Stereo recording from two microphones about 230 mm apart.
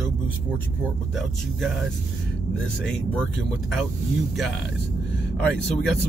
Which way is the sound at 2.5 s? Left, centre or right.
Left.